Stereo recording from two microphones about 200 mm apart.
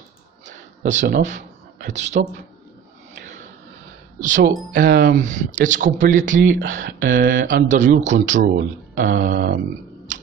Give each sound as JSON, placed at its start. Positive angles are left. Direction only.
{"t": 0.5, "sound": "a sound", "side_deg": -35}
{"t": 1.9, "sound": "speech", "side_deg": -35}
{"t": 4.7, "sound": "speech", "side_deg": -50}